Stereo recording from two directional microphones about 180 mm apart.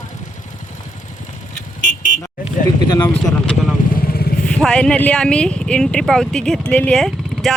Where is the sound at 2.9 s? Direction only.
25° left (ahead or behind).